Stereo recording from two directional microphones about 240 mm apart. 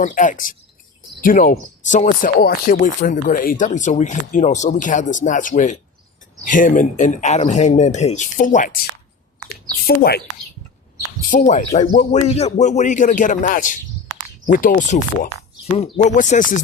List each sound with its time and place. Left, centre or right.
0.0 s speech: left
9.8 s speech: left
11.2 s speech: left